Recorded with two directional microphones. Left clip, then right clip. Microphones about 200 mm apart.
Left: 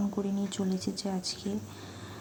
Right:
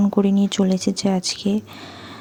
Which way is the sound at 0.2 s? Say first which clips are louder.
Right 14 dB; 45° right (ahead or behind).